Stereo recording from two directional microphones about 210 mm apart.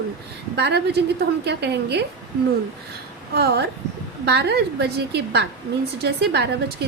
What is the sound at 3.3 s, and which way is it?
A woman's voice, 50° right (ahead or behind).